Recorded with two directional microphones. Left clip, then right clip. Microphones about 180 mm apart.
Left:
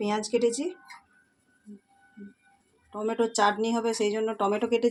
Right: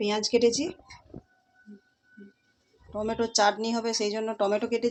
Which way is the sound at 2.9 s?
20° left (ahead or behind).